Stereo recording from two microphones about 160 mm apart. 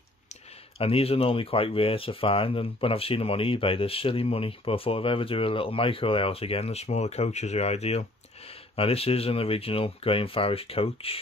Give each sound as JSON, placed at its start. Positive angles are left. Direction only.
{"t": 0.7, "sound": "speech", "side_deg": 35}